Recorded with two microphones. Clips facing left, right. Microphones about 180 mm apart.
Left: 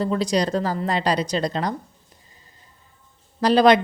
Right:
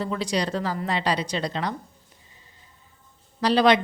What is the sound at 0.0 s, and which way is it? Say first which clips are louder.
A woman's voice: left 5 dB; 40° left (ahead or behind).